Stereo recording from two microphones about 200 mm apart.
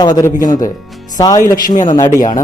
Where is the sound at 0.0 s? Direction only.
15° left (ahead or behind).